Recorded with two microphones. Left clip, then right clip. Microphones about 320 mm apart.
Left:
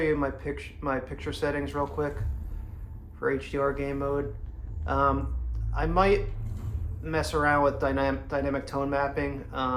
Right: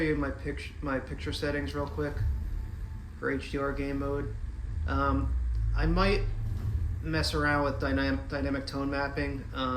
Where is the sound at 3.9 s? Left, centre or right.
Left.